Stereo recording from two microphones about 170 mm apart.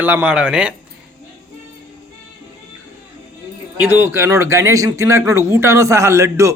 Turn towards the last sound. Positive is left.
turn(degrees=-15)  # may be behind; listen again after turning